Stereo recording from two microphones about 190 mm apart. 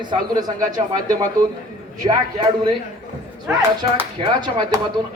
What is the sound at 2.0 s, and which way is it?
Speech, 25° right (ahead or behind).